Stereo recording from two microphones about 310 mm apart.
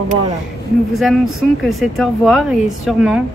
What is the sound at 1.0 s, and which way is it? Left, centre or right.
Speech, centre.